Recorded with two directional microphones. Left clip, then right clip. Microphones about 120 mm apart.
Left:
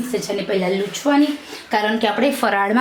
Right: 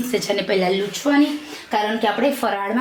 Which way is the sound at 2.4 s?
45° left (ahead or behind).